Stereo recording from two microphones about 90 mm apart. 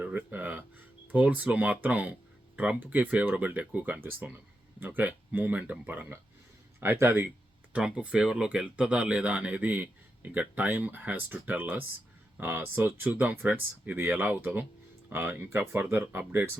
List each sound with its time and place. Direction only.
0.0 s speech: 20° right (ahead or behind)
7.7 s speech: 10° right (ahead or behind)